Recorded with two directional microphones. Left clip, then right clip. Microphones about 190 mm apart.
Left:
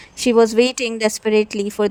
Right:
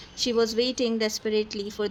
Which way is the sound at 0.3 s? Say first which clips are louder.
Left 11 dB; 45° left (ahead or behind).